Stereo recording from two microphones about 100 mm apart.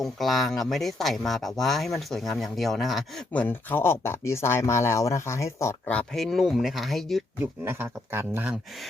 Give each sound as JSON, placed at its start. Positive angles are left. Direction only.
{"t": 0.0, "sound": "speech", "side_deg": 0}
{"t": 3.3, "sound": "speech", "side_deg": 20}
{"t": 6.1, "sound": "speech", "side_deg": 0}
{"t": 7.6, "sound": "speech", "side_deg": -25}